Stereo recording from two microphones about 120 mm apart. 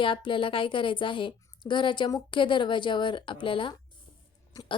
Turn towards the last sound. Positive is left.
turn(degrees=45)  # may be behind; listen again after turning